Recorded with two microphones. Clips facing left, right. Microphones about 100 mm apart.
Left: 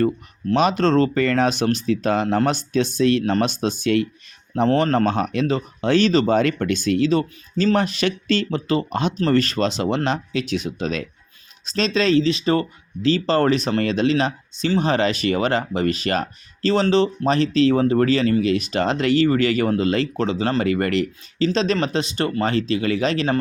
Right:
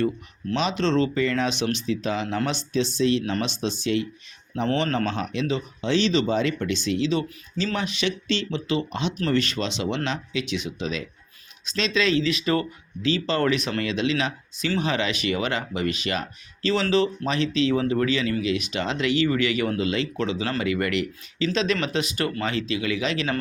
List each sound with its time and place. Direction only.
0.5 s speech: 50° left (ahead or behind)
9.1 s speech: 35° left (ahead or behind)
16.8 s speech: 30° left (ahead or behind)